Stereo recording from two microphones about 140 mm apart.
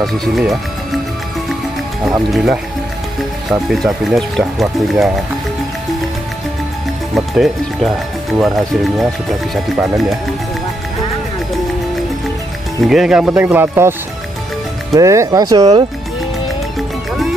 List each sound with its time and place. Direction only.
0.0 s speech: centre (ahead or behind)
2.3 s speech: 5° right (ahead or behind)
7.2 s speech: centre (ahead or behind)
12.8 s speech: 5° right (ahead or behind)
15.0 s speech: 25° right (ahead or behind)